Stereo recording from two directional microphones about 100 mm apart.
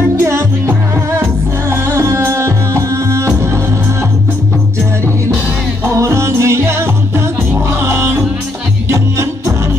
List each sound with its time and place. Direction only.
0.2 s music: 30° right (ahead or behind)
5.9 s music: 30° right (ahead or behind)
7.8 s music: 25° right (ahead or behind)